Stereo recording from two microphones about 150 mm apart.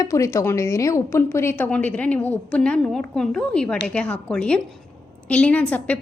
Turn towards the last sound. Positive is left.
turn(degrees=10)  # may be behind; listen again after turning